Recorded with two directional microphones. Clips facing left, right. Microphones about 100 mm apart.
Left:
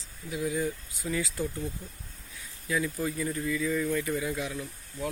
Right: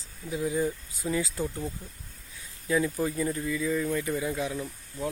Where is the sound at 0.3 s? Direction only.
25° right (ahead or behind).